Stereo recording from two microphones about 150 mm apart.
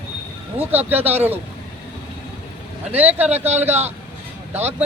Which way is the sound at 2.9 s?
10° right (ahead or behind).